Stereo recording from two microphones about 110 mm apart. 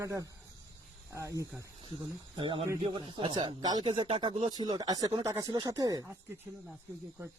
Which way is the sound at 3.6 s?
35° right (ahead or behind).